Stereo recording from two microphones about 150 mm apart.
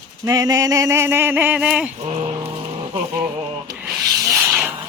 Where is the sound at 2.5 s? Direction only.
40° right (ahead or behind).